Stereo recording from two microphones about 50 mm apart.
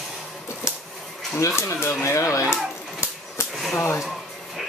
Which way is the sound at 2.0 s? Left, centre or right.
Left.